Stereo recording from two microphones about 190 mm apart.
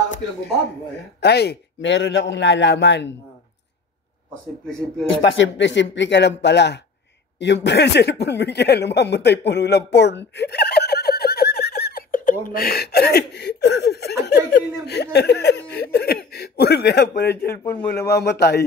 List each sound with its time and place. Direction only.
1.2 s a man's voice: 60° left (ahead or behind)
4.6 s speech: 5° left (ahead or behind)
5.2 s a man's voice: 70° left (ahead or behind)